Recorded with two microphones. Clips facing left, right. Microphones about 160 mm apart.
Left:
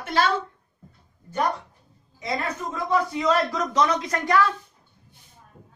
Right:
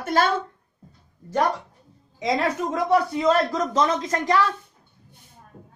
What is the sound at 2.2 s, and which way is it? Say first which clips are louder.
Speech: right 6 dB; 90° right.